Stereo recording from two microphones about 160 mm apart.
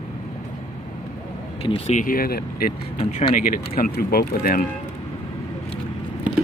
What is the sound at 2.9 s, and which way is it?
Speech, 40° left (ahead or behind).